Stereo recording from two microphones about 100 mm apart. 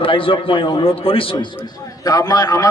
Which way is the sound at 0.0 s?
60° left (ahead or behind).